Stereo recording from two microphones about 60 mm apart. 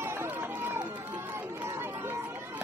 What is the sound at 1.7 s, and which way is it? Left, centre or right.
Chatter, right.